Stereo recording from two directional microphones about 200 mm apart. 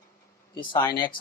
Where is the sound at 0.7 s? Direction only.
20° left (ahead or behind).